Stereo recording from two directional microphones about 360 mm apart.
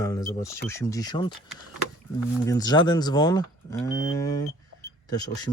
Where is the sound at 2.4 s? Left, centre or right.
Centre.